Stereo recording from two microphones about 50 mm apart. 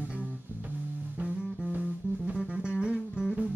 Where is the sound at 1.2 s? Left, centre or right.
Right.